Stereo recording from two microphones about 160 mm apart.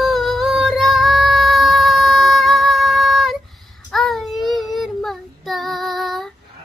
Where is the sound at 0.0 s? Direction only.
Centre (ahead or behind).